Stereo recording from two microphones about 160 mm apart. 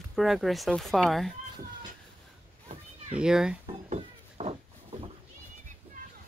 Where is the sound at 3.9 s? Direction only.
40° right (ahead or behind).